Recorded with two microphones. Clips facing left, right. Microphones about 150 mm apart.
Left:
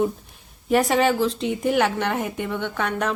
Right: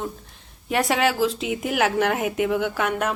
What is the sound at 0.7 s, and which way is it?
A woman's voice, centre (ahead or behind).